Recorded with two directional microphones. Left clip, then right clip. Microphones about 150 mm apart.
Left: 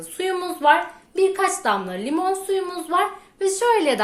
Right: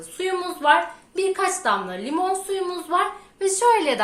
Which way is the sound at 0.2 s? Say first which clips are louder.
Left 2 dB; 40° left (ahead or behind).